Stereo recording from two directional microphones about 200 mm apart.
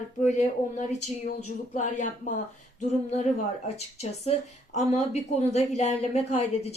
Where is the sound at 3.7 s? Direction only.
30° left (ahead or behind).